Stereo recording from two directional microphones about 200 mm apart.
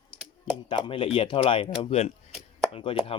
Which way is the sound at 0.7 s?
25° left (ahead or behind).